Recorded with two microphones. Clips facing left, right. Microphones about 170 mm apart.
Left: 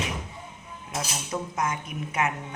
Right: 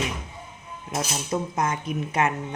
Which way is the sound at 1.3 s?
30° right (ahead or behind).